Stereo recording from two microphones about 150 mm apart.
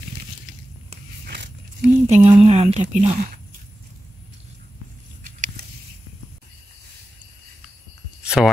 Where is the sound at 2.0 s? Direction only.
50° right (ahead or behind).